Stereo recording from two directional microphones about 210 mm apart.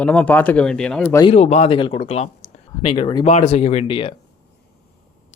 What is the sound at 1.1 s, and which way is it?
Speech, 25° left (ahead or behind).